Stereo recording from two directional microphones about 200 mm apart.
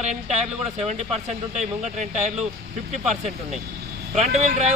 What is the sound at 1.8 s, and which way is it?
Speech, 35° right (ahead or behind).